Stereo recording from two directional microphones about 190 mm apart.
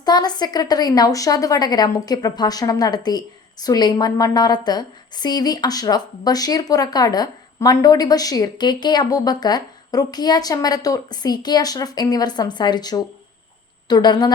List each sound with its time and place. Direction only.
0.0 s speech: 20° left (ahead or behind)